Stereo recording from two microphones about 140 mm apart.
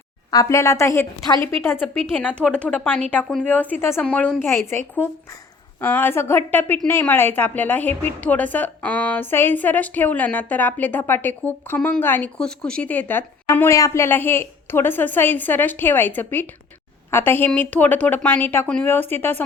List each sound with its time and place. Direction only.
0.3 s a woman's voice: 25° left (ahead or behind)
5.8 s a woman's voice: 15° left (ahead or behind)